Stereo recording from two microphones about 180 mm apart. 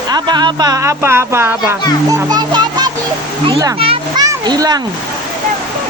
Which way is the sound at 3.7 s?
30° right (ahead or behind).